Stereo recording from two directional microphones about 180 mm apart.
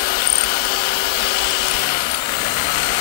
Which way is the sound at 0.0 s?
55° left (ahead or behind).